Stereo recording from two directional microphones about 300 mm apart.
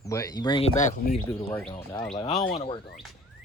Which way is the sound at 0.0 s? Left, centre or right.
Centre.